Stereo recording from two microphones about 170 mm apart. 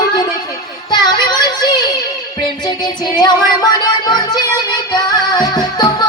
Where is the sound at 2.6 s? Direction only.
25° left (ahead or behind).